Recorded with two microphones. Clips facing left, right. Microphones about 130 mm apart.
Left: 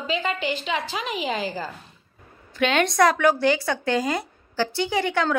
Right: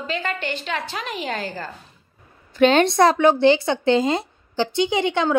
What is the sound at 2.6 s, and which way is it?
Speech, 35° right (ahead or behind).